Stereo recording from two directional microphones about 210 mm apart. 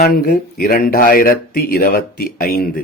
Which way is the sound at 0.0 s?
45° left (ahead or behind).